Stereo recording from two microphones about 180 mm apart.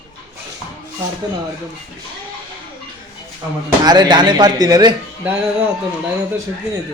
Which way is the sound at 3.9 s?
25° right (ahead or behind).